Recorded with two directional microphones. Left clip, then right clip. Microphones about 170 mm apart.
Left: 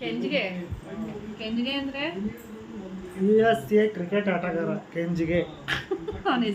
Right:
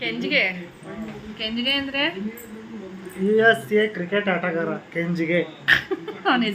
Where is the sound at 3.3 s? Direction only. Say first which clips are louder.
Right 4 dB; 5° right (ahead or behind).